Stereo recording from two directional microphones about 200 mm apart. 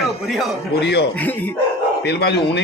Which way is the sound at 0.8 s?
55° left (ahead or behind).